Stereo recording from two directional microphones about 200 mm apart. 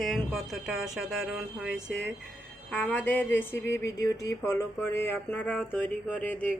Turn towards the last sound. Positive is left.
turn(degrees=10)  # may be behind; listen again after turning